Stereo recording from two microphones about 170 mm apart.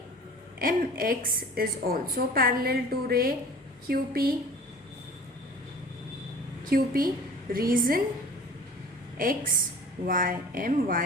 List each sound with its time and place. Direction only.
0.6 s a woman's voice: 55° right (ahead or behind)
6.7 s a woman's voice: 60° right (ahead or behind)
9.1 s a woman's voice: 55° right (ahead or behind)